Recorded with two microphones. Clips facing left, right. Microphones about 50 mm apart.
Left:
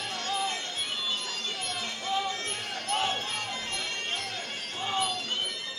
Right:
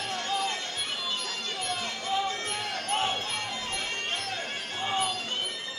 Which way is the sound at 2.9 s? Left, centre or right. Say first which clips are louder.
Even; right.